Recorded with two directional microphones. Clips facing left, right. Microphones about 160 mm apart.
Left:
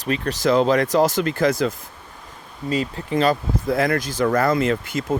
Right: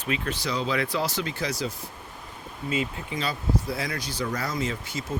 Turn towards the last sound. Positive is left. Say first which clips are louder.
# left 9 dB
turn(degrees=60)  # may be behind; listen again after turning